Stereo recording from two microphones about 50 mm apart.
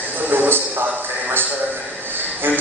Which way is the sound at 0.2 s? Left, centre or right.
Right.